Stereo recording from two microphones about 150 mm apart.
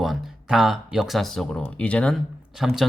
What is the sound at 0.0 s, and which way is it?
Speech, centre (ahead or behind).